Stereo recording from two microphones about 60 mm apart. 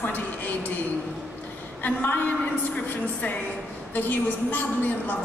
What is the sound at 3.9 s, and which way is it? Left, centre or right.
A woman's voice, left.